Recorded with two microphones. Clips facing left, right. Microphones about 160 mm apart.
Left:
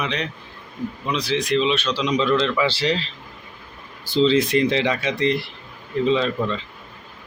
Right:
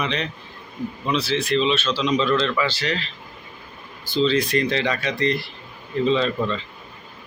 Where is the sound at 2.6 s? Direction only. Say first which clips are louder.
Left 4 dB; 30° left (ahead or behind).